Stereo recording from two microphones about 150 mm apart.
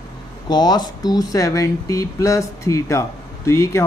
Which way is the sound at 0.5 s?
25° left (ahead or behind).